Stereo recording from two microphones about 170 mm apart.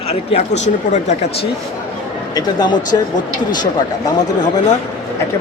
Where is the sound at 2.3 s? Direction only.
25° left (ahead or behind).